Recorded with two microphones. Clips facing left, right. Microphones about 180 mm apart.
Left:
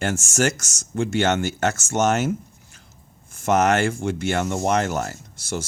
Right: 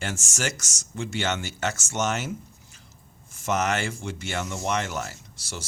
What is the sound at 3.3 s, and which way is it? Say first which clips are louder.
Speech: left 7 dB; 50° left (ahead or behind).